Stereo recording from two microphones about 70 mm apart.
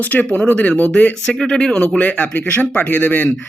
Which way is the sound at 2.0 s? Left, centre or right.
Left.